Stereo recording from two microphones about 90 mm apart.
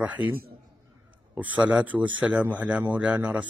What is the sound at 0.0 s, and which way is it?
Speech, 15° right (ahead or behind).